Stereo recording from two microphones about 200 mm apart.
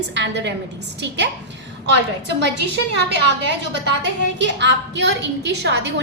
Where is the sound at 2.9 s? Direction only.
60° right (ahead or behind).